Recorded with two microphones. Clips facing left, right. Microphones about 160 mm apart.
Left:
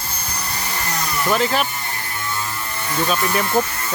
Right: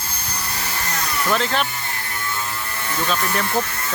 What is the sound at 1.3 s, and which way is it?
Speech, 10° left (ahead or behind).